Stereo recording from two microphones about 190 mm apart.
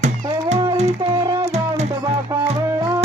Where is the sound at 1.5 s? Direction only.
35° right (ahead or behind).